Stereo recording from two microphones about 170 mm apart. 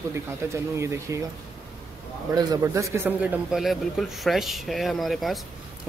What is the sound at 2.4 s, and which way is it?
A man's voice, 20° right (ahead or behind).